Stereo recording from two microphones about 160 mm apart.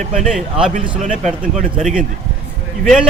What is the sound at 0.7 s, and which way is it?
Speech, 50° right (ahead or behind).